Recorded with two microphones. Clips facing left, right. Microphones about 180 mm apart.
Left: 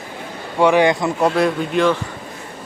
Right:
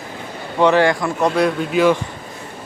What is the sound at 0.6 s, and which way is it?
Speech, 15° left (ahead or behind).